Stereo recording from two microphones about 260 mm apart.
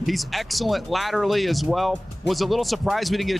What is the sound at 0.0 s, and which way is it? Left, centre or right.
Speech, centre.